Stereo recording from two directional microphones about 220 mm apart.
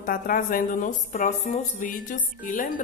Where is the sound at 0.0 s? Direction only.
40° left (ahead or behind).